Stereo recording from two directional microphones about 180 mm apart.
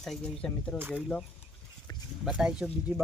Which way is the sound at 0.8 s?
10° right (ahead or behind).